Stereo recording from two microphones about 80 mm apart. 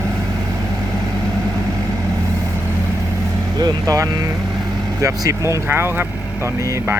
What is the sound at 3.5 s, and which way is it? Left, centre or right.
Speech, right.